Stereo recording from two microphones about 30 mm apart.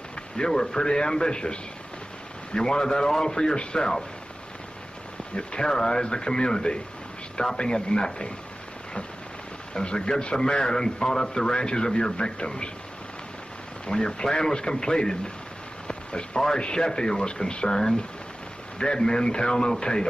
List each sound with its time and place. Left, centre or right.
0.4 s a man's voice: left
5.3 s a man's voice: left
9.8 s a man's voice: left
13.8 s a man's voice: left